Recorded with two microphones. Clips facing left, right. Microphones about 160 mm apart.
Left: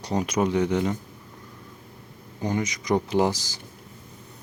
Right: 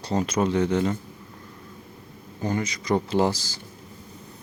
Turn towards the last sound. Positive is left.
turn(degrees=15)  # may be behind; listen again after turning